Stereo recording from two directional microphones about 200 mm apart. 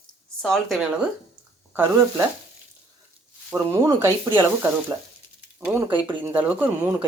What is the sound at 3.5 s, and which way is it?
Speech, 15° right (ahead or behind).